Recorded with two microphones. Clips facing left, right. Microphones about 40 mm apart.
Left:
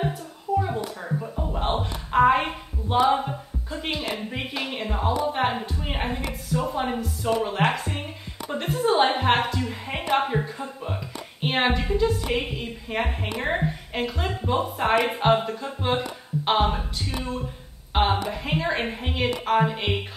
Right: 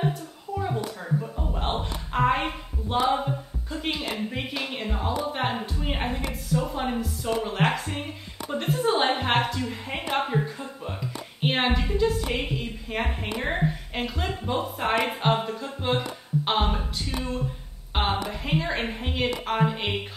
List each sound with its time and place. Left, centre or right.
0.6 s a woman's voice: centre